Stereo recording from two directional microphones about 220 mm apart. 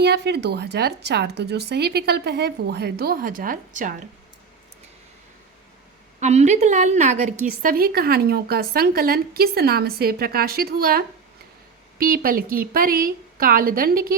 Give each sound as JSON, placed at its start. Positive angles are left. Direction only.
{"t": 0.0, "sound": "a woman's voice", "side_deg": -50}
{"t": 6.1, "sound": "a woman's voice", "side_deg": -30}